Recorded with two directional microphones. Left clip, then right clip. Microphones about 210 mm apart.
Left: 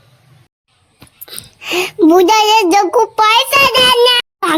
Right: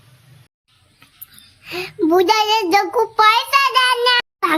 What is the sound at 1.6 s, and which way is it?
Child singing, 35° left (ahead or behind).